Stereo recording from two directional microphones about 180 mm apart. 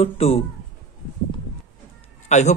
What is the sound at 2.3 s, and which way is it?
Speech, 40° left (ahead or behind).